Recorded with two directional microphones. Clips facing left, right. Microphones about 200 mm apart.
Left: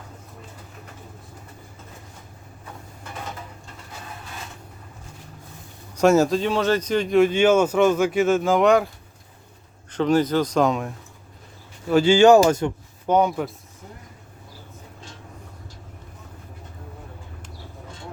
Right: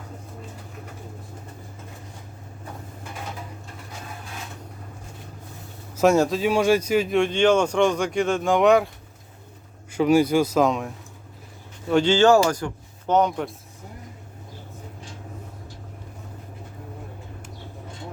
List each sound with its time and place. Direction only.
6.0 s speech: centre (ahead or behind)
7.2 s speech: 5° left (ahead or behind)
9.9 s speech: 10° right (ahead or behind); by 12.7 s 20° left (ahead or behind)
13.1 s speech: 10° left (ahead or behind)